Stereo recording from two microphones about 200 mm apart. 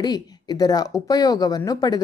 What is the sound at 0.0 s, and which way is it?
A woman's voice, 20° left (ahead or behind).